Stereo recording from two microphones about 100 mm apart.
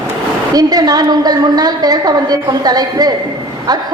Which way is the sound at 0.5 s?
40° right (ahead or behind).